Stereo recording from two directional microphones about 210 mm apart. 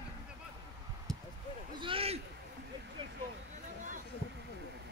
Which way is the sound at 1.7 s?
25° right (ahead or behind).